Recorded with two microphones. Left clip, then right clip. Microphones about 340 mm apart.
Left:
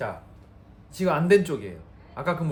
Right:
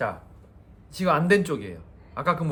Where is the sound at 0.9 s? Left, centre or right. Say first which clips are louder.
Left 1 dB; centre.